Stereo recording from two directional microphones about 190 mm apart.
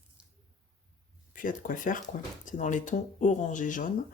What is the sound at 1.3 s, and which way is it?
Speech, 45° left (ahead or behind).